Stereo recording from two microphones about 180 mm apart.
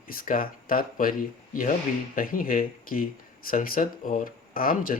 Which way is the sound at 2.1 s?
50° left (ahead or behind).